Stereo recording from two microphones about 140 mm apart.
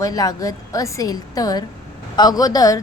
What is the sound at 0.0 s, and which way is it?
A woman's voice, 25° left (ahead or behind).